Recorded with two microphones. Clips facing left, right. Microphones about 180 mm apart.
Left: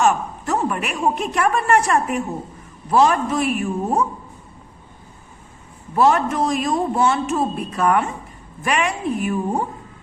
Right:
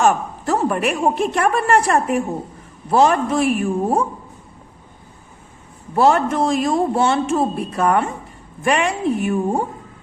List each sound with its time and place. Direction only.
0.0 s a woman's voice: 35° right (ahead or behind)
5.9 s a woman's voice: 30° right (ahead or behind)